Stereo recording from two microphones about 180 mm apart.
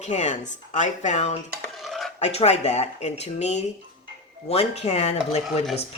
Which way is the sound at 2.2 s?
35° left (ahead or behind).